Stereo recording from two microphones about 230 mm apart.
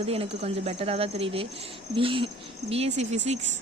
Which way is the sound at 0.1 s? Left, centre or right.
Right.